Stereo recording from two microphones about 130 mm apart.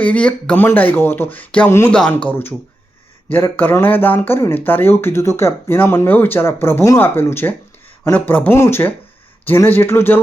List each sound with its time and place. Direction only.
0.0 s speech: 10° left (ahead or behind)